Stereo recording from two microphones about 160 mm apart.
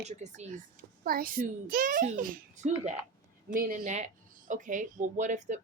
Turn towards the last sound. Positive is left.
turn(degrees=-50)  # may be behind; listen again after turning